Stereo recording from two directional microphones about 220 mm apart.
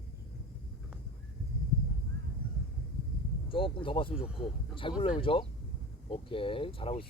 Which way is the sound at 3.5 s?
25° left (ahead or behind).